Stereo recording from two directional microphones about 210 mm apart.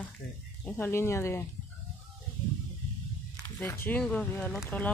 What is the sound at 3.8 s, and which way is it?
Speech, 5° left (ahead or behind).